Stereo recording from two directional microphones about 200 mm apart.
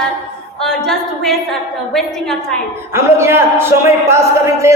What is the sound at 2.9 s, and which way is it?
A man's voice, 10° right (ahead or behind).